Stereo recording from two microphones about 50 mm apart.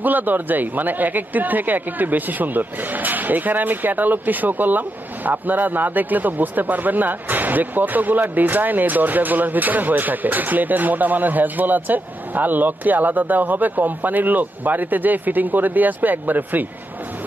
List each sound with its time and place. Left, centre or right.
0.0 s speech: right